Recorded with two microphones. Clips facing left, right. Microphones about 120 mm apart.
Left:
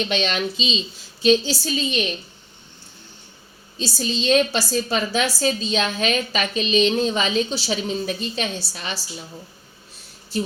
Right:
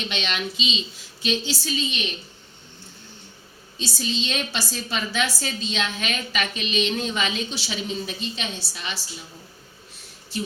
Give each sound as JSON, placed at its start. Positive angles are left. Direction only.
{"t": 0.1, "sound": "a woman's voice", "side_deg": 40}
{"t": 3.8, "sound": "a woman's voice", "side_deg": 40}
{"t": 10.3, "sound": "speech", "side_deg": 40}